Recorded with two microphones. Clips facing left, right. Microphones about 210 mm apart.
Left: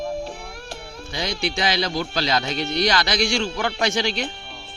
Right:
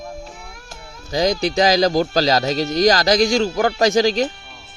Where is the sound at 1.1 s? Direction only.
40° right (ahead or behind).